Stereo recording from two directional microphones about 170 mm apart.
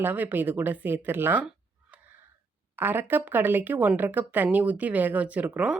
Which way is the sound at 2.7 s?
10° right (ahead or behind).